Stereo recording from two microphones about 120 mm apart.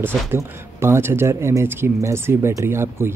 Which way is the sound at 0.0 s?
20° right (ahead or behind).